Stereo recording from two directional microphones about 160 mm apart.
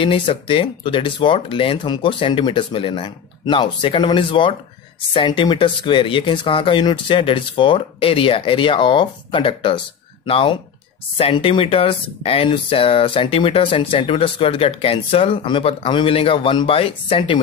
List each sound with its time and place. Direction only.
0.0 s speech: 35° left (ahead or behind)